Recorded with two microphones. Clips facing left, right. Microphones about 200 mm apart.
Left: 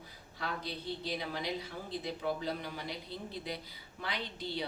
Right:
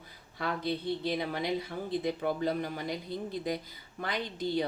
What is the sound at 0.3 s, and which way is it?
A woman's voice, 55° right (ahead or behind).